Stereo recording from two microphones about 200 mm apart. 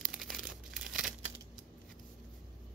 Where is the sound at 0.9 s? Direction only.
Centre (ahead or behind).